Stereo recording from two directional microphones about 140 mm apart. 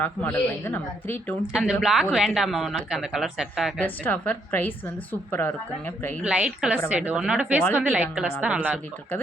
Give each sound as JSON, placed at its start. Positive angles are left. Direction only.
{"t": 0.3, "sound": "a woman's voice", "side_deg": 15}
{"t": 1.5, "sound": "speech", "side_deg": -5}
{"t": 3.8, "sound": "a woman's voice", "side_deg": 10}
{"t": 6.2, "sound": "a woman's voice", "side_deg": -5}